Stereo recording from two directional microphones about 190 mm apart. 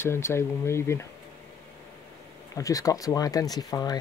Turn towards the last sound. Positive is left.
turn(degrees=20)  # may be behind; listen again after turning